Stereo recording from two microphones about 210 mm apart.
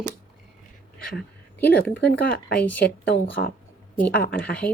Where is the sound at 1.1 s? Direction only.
5° left (ahead or behind).